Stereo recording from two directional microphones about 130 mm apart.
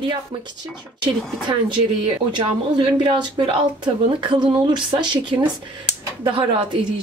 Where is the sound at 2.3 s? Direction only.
40° right (ahead or behind).